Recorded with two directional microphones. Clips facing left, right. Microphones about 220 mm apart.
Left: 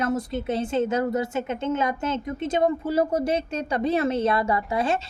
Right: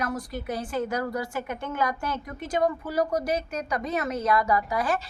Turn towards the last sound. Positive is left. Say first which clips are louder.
# left 2 dB
turn(degrees=25)  # may be behind; listen again after turning